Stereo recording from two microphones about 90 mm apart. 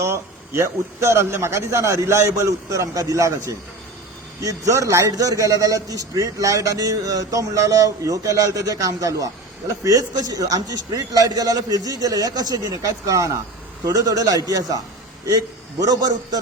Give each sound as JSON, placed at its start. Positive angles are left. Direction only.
{"t": 0.0, "sound": "a man's voice", "side_deg": -30}